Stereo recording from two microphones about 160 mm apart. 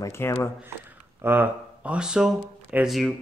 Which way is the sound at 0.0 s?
15° left (ahead or behind).